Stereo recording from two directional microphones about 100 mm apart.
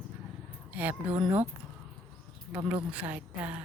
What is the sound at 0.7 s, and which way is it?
Speech, 15° right (ahead or behind).